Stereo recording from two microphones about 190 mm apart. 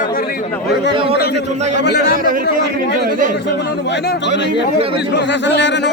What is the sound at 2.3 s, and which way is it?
A man's voice, 45° right (ahead or behind).